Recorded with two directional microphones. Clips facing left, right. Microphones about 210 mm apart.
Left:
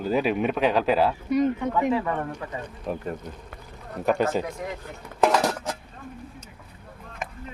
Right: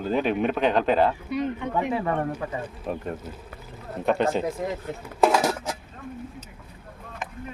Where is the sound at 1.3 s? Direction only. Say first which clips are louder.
Left 4 dB; 45° left (ahead or behind).